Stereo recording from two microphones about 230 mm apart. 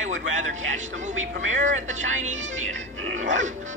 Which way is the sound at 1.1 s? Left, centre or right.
Right.